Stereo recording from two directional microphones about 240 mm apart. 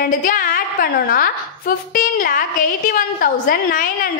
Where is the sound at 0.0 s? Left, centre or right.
Left.